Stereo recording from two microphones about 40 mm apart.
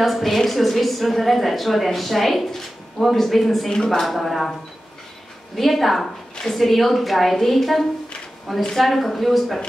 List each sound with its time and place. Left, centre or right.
0.0 s a woman's voice: centre
3.7 s a woman's voice: centre
4.0 s a woman's voice: centre
5.6 s a woman's voice: centre